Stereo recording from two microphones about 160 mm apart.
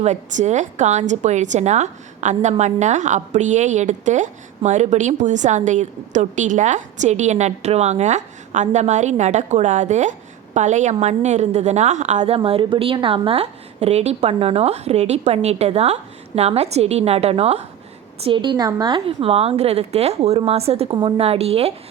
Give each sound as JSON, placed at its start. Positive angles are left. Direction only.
{"t": 0.0, "sound": "a woman's voice", "side_deg": -45}